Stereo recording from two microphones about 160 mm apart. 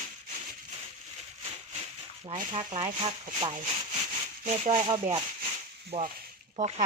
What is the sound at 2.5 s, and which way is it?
Speech, 35° right (ahead or behind).